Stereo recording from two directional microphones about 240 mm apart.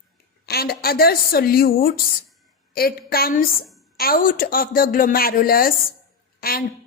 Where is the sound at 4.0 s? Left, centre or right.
Left.